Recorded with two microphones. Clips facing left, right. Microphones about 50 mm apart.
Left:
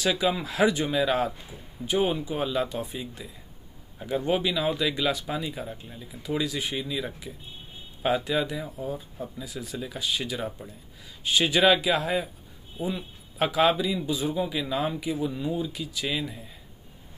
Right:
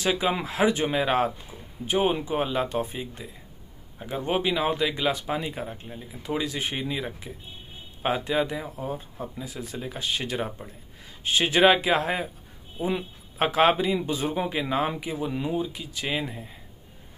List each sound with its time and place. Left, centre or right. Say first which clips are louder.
0.0 s speech: even; right